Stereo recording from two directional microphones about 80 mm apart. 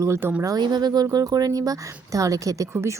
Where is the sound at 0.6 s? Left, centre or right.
Right.